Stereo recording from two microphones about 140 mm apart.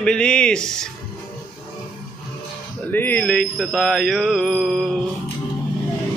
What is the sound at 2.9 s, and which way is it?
Mantra, 15° left (ahead or behind).